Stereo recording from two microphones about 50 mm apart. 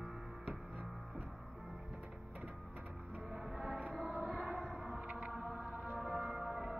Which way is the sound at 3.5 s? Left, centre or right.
Centre.